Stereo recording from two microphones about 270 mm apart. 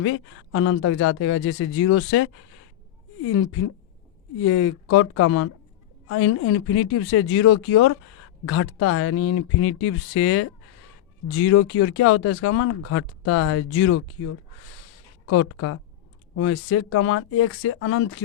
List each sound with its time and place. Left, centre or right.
0.0 s speech: left
15.3 s speech: left